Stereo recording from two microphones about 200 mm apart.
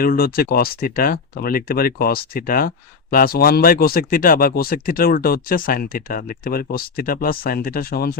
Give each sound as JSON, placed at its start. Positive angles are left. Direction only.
{"t": 0.0, "sound": "speech", "side_deg": 50}